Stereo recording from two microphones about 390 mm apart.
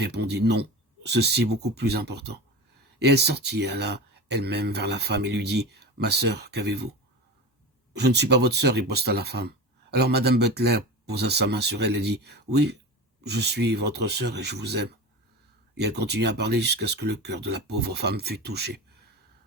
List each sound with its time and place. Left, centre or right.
0.0 s speech: right
7.9 s speech: right